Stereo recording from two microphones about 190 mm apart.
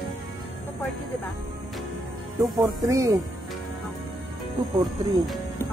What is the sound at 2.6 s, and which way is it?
Speech, 15° right (ahead or behind).